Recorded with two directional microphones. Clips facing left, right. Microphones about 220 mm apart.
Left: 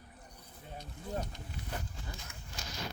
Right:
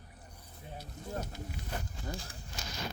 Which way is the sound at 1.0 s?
40° right (ahead or behind).